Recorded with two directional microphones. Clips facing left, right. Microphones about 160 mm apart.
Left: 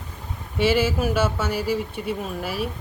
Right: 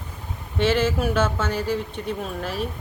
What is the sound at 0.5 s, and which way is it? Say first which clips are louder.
Speech: even; 10° left (ahead or behind).